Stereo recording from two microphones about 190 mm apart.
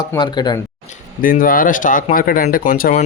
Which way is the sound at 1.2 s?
50° left (ahead or behind).